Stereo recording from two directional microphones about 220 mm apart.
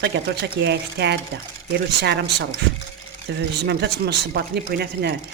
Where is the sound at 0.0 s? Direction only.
50° right (ahead or behind).